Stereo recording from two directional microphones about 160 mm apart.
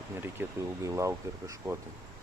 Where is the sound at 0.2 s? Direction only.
15° right (ahead or behind).